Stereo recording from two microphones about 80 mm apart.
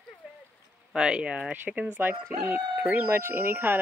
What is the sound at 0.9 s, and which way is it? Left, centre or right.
Speech, centre.